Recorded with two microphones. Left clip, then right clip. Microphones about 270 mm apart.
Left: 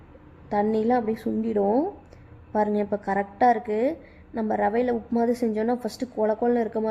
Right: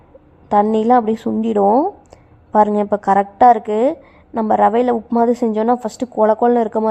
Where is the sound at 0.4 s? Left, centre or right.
Right.